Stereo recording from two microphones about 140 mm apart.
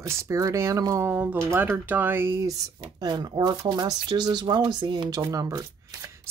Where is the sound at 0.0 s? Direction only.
20° right (ahead or behind).